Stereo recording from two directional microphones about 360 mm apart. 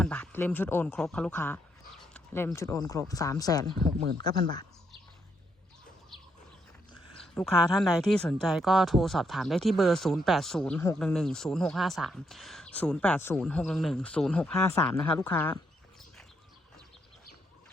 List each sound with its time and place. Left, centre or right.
0.0 s speech: centre
3.8 s speech: right
7.2 s speech: centre